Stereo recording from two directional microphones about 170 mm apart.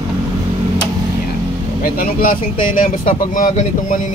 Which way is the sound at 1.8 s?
55° left (ahead or behind).